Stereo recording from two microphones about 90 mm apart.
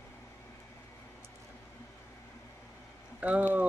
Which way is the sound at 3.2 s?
15° right (ahead or behind).